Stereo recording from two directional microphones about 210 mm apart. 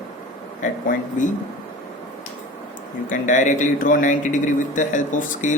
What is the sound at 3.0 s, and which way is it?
A man's voice, 35° left (ahead or behind).